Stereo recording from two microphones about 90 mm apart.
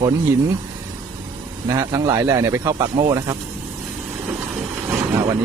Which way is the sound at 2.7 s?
50° right (ahead or behind).